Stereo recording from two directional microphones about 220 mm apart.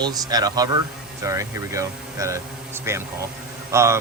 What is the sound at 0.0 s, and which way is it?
Speech, 15° right (ahead or behind).